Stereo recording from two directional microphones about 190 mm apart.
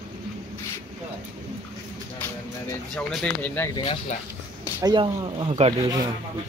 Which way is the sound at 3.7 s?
25° left (ahead or behind).